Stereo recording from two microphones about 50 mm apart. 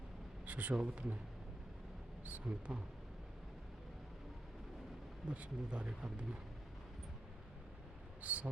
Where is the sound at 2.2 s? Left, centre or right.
Right.